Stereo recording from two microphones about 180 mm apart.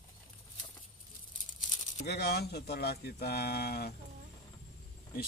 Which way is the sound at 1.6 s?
45° left (ahead or behind).